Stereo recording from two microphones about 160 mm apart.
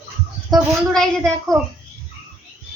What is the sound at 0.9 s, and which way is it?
Speech, 5° left (ahead or behind).